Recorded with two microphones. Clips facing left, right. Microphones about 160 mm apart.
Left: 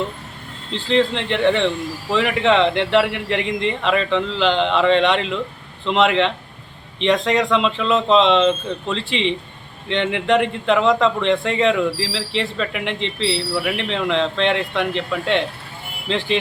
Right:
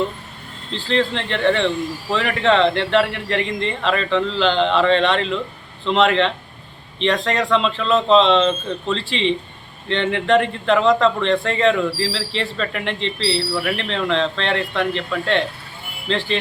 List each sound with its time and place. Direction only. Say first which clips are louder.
0.9 s speech: left 2 dB; 15° left (ahead or behind)